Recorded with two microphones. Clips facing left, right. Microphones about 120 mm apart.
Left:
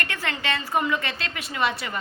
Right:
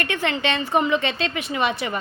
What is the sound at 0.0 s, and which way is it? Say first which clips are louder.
A woman's voice: right 6 dB; 20° right (ahead or behind).